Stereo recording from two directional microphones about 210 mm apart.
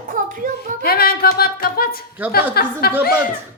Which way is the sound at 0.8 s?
45° left (ahead or behind).